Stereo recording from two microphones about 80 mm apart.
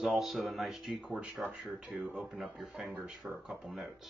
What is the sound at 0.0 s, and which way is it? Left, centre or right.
Speech, centre.